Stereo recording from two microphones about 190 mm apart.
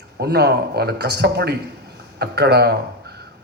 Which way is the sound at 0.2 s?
60° right (ahead or behind).